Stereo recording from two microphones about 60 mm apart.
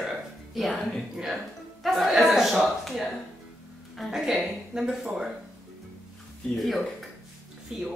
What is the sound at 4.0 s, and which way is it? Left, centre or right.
Speech, centre.